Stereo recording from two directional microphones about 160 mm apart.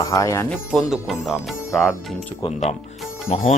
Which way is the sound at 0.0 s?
20° left (ahead or behind).